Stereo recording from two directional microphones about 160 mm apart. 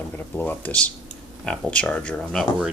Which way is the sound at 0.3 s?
10° left (ahead or behind).